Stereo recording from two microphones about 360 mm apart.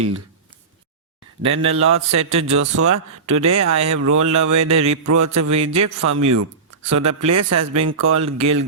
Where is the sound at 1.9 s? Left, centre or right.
Right.